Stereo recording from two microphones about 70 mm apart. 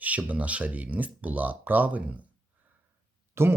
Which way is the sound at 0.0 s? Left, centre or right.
Right.